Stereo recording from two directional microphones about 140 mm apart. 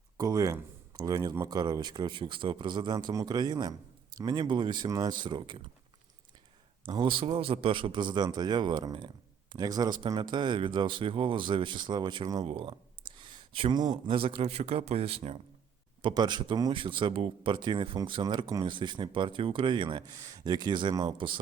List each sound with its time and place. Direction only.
0.2 s speech: 25° right (ahead or behind)
6.8 s speech: 35° right (ahead or behind)
16.0 s speech: 35° right (ahead or behind)